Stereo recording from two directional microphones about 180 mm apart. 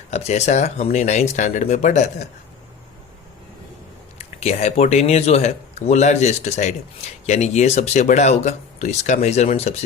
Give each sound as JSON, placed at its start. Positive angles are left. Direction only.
{"t": 0.1, "sound": "speech", "side_deg": 35}
{"t": 4.4, "sound": "speech", "side_deg": 35}